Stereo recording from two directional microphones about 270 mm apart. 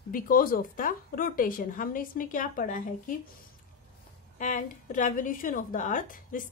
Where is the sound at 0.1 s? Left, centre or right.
Left.